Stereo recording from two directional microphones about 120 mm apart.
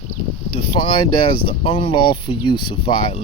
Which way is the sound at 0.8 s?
45° left (ahead or behind).